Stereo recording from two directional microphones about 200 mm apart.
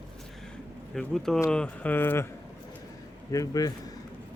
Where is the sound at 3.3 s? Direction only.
15° left (ahead or behind).